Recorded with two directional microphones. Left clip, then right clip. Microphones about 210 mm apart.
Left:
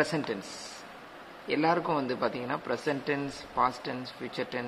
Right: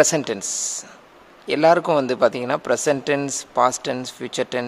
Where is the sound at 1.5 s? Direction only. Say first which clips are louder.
Right 11 dB; 60° right (ahead or behind).